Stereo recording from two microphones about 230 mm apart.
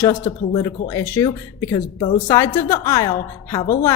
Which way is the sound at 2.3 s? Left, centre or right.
Centre.